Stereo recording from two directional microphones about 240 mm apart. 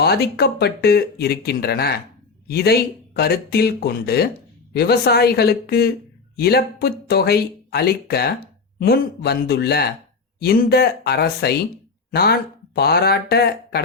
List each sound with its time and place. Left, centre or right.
0.0 s speech: left